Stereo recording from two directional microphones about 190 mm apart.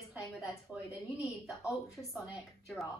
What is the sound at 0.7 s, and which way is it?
Speech, 5° right (ahead or behind).